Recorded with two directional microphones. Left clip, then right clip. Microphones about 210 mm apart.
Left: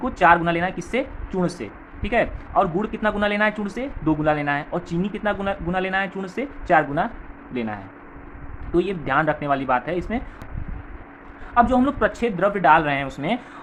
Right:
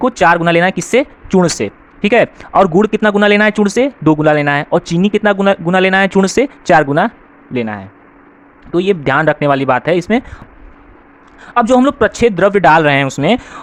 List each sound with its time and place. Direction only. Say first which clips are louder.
0.0 s speech: right 6 dB; 45° right (ahead or behind)
11.5 s speech: right 8 dB; 55° right (ahead or behind)